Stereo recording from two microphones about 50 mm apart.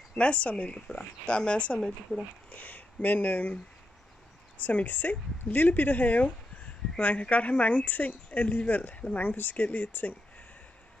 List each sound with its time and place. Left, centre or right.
0.1 s speech: left
1.8 s speech: centre
2.5 s speech: left
4.6 s speech: left